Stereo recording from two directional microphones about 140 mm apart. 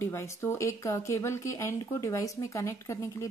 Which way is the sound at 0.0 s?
20° left (ahead or behind).